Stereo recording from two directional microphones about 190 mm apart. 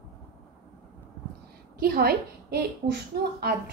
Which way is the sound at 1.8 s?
55° right (ahead or behind).